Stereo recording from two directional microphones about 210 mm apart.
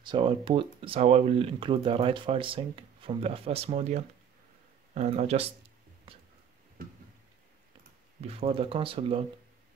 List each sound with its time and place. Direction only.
0.0 s speech: 25° right (ahead or behind)
6.1 s a sound: 25° right (ahead or behind)
8.2 s speech: 30° right (ahead or behind)